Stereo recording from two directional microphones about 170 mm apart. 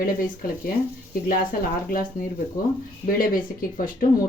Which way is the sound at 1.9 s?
55° left (ahead or behind).